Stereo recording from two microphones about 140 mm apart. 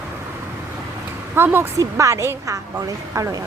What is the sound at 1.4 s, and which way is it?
Speech, 15° right (ahead or behind).